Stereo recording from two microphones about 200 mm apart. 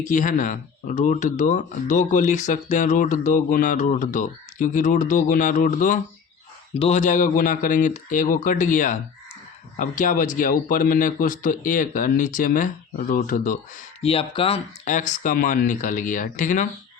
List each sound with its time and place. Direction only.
0.0 s speech: 40° left (ahead or behind)
14.0 s speech: 30° left (ahead or behind)